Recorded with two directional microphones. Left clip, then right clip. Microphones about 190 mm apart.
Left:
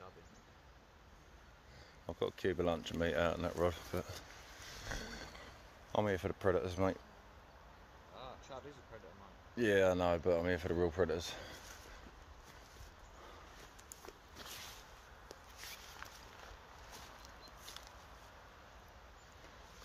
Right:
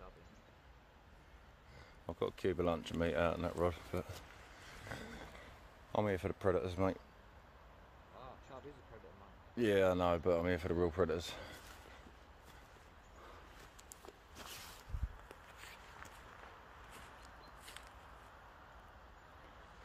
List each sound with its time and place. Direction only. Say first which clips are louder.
2.0 s speech: even; 15° right (ahead or behind)
4.8 s a sound: left 3 dB; centre (ahead or behind)
5.9 s speech: left 1 dB; 5° right (ahead or behind)
9.6 s speech: left 1 dB; 15° right (ahead or behind)